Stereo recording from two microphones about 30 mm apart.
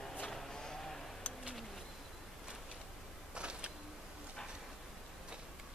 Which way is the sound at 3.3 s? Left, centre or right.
Right.